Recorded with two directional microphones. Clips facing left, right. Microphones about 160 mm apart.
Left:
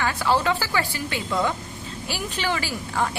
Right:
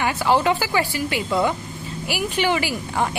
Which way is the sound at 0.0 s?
15° right (ahead or behind).